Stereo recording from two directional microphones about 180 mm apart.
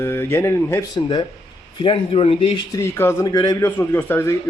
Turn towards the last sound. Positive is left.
turn(degrees=15)  # may be behind; listen again after turning